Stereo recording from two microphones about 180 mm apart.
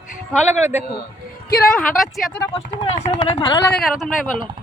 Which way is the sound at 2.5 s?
35° left (ahead or behind).